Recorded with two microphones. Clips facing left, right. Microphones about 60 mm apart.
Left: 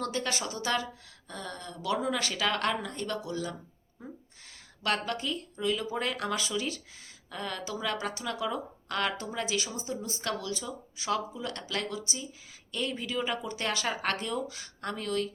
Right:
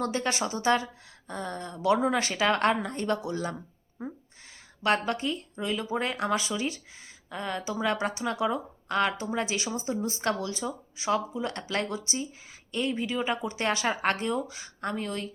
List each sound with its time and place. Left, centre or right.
0.0 s speech: right
9.3 s speech: right
12.7 s speech: centre